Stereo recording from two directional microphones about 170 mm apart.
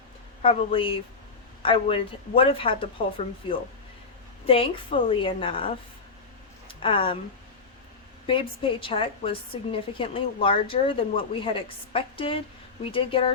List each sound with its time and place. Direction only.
0.4 s a woman's voice: 30° left (ahead or behind)
8.3 s a woman's voice: 30° left (ahead or behind)